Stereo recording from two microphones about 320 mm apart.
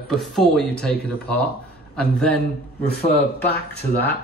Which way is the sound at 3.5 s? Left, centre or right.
Left.